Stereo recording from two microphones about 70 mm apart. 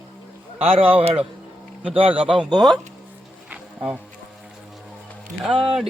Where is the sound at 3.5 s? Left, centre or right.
Centre.